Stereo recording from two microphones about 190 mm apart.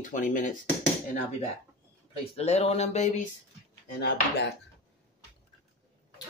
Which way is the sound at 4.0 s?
60° left (ahead or behind).